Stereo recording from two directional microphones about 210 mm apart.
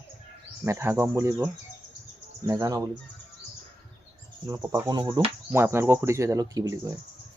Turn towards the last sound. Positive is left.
turn(degrees=-15)  # may be behind; listen again after turning